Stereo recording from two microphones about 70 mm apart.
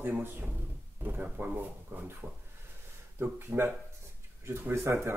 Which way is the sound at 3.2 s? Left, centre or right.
Right.